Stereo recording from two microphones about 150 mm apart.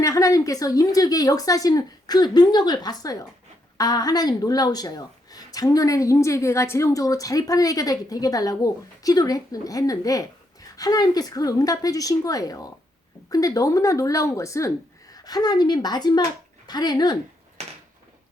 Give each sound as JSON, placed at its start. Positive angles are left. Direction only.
{"t": 0.0, "sound": "speech", "side_deg": 20}